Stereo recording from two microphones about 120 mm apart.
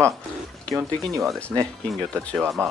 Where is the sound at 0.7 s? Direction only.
Centre (ahead or behind).